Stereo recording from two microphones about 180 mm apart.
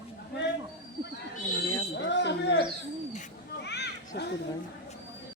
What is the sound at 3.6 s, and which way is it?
Children playing, 70° left (ahead or behind).